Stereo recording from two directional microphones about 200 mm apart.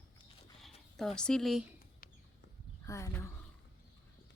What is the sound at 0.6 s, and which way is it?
Speech, centre (ahead or behind).